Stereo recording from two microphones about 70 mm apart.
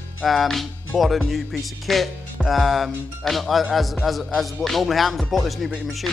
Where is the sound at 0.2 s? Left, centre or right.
Centre.